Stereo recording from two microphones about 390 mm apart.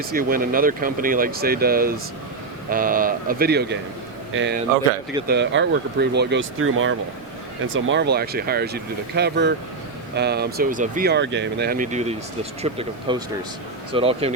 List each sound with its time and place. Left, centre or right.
0.0 s speech: right